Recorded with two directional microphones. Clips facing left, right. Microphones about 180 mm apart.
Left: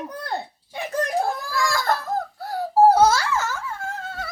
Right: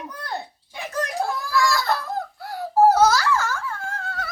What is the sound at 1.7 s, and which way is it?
Giggle, 45° left (ahead or behind).